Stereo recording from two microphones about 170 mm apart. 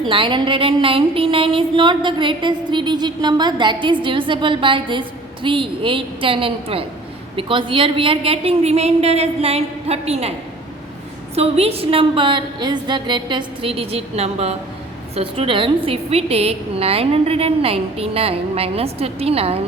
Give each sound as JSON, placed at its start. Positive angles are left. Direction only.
{"t": 0.0, "sound": "a woman's voice", "side_deg": -30}
{"t": 11.3, "sound": "a woman's voice", "side_deg": -35}